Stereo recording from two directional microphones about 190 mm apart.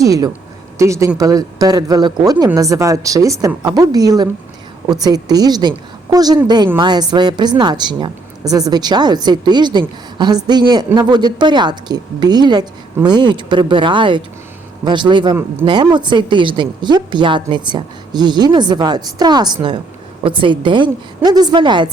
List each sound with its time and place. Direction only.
0.0 s a woman's voice: 20° right (ahead or behind)